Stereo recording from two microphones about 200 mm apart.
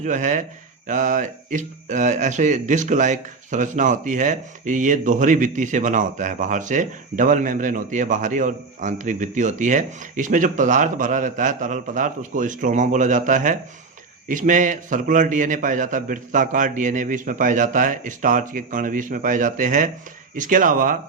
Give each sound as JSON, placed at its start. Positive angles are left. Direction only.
{"t": 0.0, "sound": "speech", "side_deg": -40}